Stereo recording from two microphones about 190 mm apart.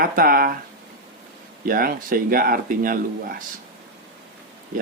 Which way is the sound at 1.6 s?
50° right (ahead or behind).